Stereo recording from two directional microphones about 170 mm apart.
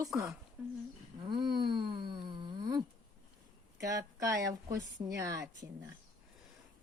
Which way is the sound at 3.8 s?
20° right (ahead or behind).